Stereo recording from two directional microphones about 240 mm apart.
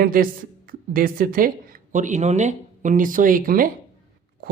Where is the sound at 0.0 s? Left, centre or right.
Right.